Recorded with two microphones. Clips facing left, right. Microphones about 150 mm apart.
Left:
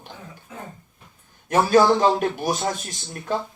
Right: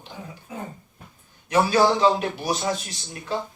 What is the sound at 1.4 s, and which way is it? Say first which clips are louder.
A man's voice: left 3 dB; 45° left (ahead or behind).